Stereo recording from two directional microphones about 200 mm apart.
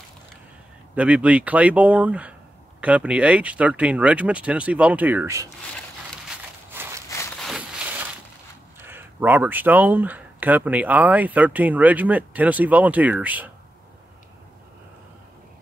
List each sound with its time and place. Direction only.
0.9 s speech: 5° right (ahead or behind)
7.3 s a sound: centre (ahead or behind)
8.8 s speech: 10° right (ahead or behind)